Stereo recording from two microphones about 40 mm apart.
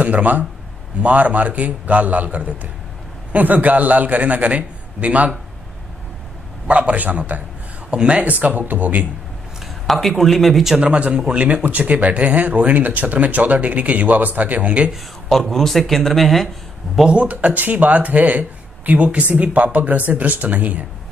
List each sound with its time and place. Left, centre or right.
0.0 s speech: right
6.7 s speech: right
7.9 s speech: right
9.8 s speech: centre
10.8 s a man's voice: right
11.6 s speech: right
11.9 s speech: right
15.3 s speech: centre
17.1 s speech: right